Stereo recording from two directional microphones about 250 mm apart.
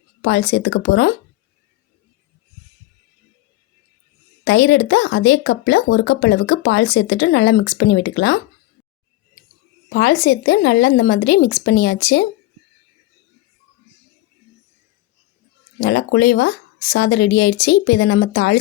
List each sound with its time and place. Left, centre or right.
0.2 s speech: left
4.4 s speech: left
9.9 s a woman's voice: left
15.8 s speech: left